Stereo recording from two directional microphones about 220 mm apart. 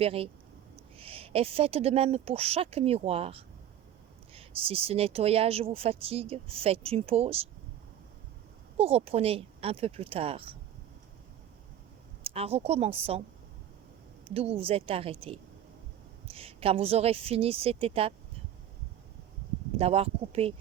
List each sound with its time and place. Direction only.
0.0 s a woman's voice: 25° right (ahead or behind)
8.8 s a woman's voice: 25° right (ahead or behind)
12.2 s a woman's voice: 25° right (ahead or behind)
14.3 s a woman's voice: 25° right (ahead or behind)
19.8 s a woman's voice: 30° right (ahead or behind)